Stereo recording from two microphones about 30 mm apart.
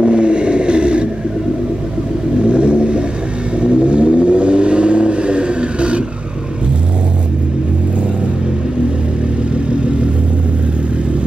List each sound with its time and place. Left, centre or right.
0.0 s vehicle: right
2.4 s vehicle: right